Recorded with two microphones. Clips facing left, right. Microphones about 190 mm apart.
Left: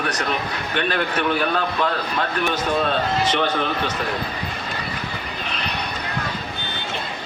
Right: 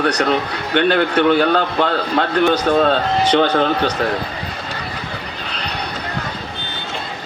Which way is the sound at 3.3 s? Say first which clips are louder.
Right 7 dB; 80° right.